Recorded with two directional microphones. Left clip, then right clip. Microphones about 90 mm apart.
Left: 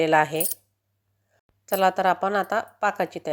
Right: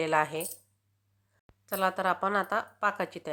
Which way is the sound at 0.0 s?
40° left (ahead or behind).